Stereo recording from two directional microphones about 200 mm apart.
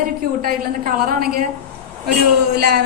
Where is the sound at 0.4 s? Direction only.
45° right (ahead or behind).